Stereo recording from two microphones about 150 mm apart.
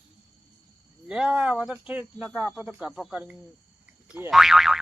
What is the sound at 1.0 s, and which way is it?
Speech, 5° right (ahead or behind).